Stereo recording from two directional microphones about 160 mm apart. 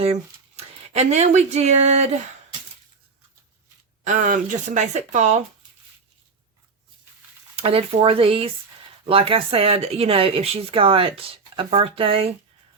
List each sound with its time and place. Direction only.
0.0 s speech: 40° right (ahead or behind)
4.0 s speech: 50° right (ahead or behind)
7.5 s speech: 35° right (ahead or behind)